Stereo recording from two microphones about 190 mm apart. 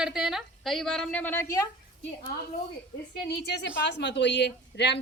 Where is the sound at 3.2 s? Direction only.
60° left (ahead or behind).